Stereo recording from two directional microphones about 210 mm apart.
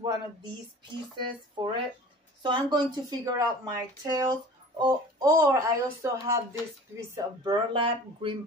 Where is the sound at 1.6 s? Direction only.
20° right (ahead or behind).